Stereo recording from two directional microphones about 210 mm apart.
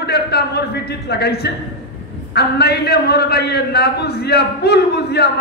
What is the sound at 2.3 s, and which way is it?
A man's voice, 50° left (ahead or behind).